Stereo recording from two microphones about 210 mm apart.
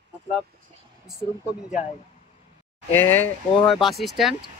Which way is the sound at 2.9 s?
10° left (ahead or behind).